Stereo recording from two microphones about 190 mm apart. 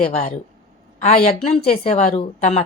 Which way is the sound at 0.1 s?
35° left (ahead or behind).